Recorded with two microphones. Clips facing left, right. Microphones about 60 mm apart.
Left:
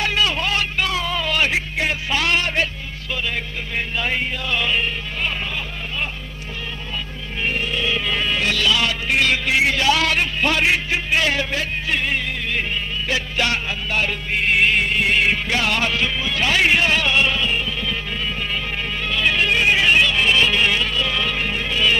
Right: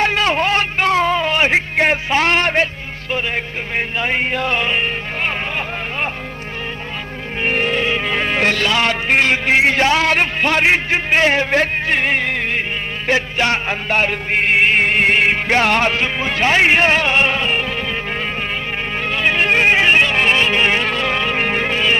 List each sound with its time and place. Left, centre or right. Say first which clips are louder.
0.0 s music: right 5 dB; right
1.7 s music: right 7 dB; right
2.0 s a sound: right 5 dB; right
3.1 s music: right 4 dB; right
7.4 s insect: right 6 dB; right
7.9 s music: right 3 dB; right
9.2 s a man's voice: right 3 dB; right
13.1 s music: right 6 dB; right
19.1 s music: right 3 dB; right